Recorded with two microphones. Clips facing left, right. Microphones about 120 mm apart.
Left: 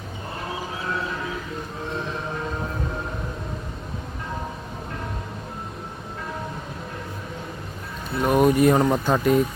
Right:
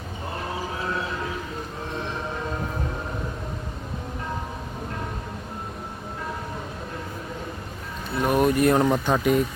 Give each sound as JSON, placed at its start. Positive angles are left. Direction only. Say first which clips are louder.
{"t": 8.2, "sound": "speech", "louder": "left 2 dB", "side_deg": 0}